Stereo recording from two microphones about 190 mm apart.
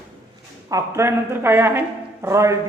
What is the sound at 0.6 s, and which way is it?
A woman's voice, 15° right (ahead or behind).